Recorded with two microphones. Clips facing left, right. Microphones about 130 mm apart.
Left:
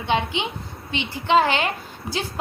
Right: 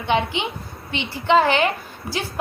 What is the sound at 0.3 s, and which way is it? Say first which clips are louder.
A woman's voice: right 1 dB; 20° left (ahead or behind).